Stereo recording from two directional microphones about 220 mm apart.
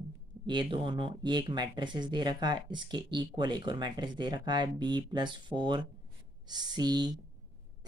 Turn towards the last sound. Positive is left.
turn(degrees=-20)  # may be behind; listen again after turning